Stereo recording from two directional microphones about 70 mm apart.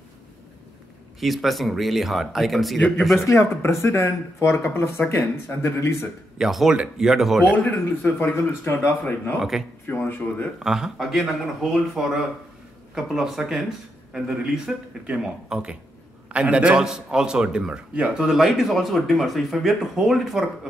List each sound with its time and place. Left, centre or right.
1.2 s speech: centre
3.3 s speech: left
6.3 s speech: centre
7.5 s speech: left
8.2 s speech: left
9.4 s speech: centre
9.8 s speech: left
10.6 s a man's voice: centre